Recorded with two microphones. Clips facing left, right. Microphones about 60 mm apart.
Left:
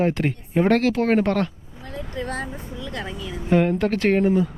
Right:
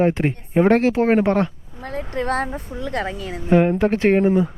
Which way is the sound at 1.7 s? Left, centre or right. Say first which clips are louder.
Right 5 dB; right.